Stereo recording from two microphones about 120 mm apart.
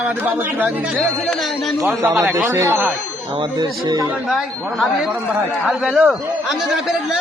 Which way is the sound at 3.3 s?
40° right (ahead or behind).